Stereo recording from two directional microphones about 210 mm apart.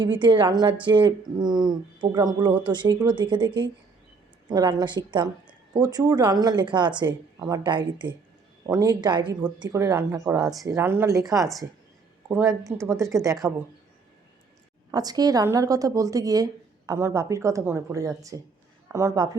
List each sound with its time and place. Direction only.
0.0 s a woman's voice: 20° right (ahead or behind)
14.8 s a woman's voice: 20° right (ahead or behind)